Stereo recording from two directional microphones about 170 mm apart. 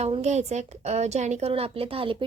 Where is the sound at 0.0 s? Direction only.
40° right (ahead or behind).